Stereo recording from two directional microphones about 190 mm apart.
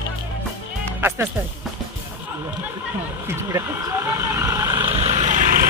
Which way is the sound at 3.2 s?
15° right (ahead or behind).